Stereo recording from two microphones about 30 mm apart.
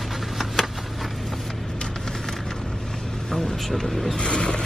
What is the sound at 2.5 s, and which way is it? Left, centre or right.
Vehicle, left.